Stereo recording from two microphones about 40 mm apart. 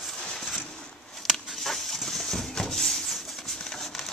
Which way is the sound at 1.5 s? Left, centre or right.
Centre.